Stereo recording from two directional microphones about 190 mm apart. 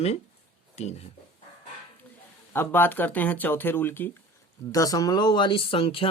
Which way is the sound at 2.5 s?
10° left (ahead or behind).